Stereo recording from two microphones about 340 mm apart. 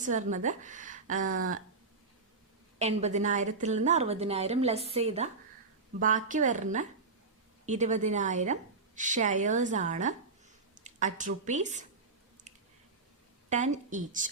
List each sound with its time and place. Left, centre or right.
0.0 s a woman's voice: right
2.7 s a woman's voice: centre
12.5 s a sound: centre
13.5 s a woman's voice: right